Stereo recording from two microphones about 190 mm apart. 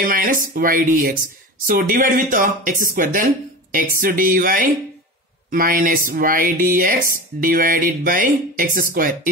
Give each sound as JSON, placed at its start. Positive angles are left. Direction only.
{"t": 0.0, "sound": "speech", "side_deg": -45}